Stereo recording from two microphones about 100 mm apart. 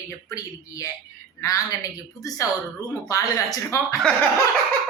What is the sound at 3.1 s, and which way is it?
Speech, 35° left (ahead or behind).